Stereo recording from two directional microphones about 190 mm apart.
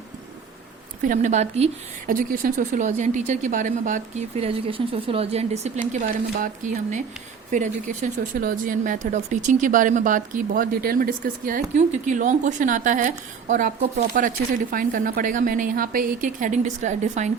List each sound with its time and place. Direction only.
1.0 s speech: 40° right (ahead or behind)
2.0 s speech: 50° right (ahead or behind)
7.5 s speech: 40° right (ahead or behind)